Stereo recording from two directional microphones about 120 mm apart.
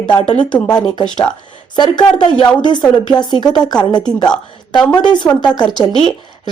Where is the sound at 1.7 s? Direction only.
40° left (ahead or behind).